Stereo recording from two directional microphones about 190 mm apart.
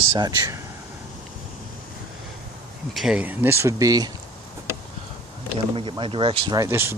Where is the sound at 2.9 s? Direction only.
Centre (ahead or behind); by 4.1 s 20° right (ahead or behind).